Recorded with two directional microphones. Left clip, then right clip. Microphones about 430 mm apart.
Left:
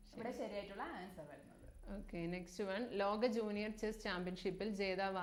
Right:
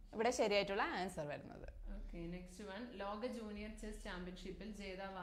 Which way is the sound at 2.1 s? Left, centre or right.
Left.